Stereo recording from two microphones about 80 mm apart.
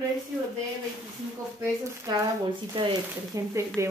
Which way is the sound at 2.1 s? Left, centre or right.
Right.